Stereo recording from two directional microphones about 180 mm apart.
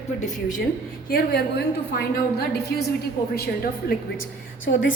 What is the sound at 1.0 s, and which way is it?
A woman's voice, 60° left (ahead or behind).